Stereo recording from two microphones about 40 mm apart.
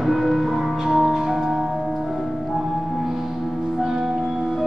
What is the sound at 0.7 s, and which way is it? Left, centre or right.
Music, centre.